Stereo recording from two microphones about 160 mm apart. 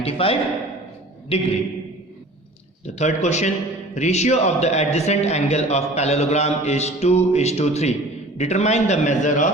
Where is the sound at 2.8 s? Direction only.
45° left (ahead or behind).